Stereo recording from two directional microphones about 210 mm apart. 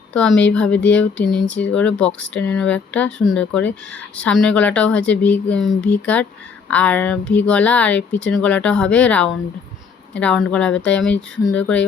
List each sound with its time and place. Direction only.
0.1 s speech: 5° left (ahead or behind)